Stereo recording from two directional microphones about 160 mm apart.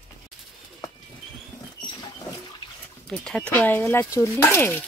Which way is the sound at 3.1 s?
5° left (ahead or behind).